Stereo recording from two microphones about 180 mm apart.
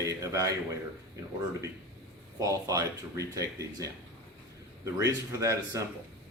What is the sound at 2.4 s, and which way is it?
Speech, 20° right (ahead or behind).